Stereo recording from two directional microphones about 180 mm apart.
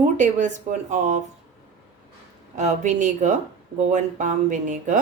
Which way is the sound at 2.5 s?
40° right (ahead or behind).